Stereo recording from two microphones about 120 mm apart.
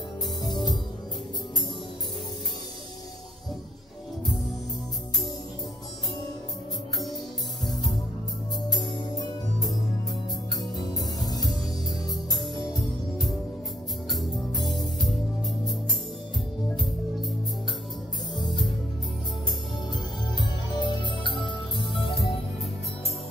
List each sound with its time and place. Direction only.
10.8 s music: 30° left (ahead or behind)
12.7 s music: centre (ahead or behind)
18.3 s music: 40° left (ahead or behind)
20.3 s music: 40° left (ahead or behind)